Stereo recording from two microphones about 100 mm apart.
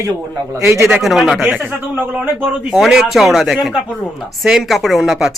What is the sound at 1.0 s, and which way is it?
Speech, centre (ahead or behind).